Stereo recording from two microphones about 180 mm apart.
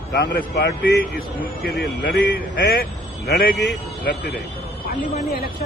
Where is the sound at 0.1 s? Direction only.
65° left (ahead or behind).